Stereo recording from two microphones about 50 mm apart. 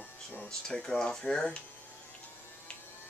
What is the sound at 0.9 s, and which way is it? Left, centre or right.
Speech, centre.